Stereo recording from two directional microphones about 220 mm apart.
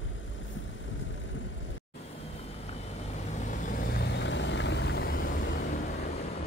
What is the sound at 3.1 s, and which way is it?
Vehicle, 35° left (ahead or behind).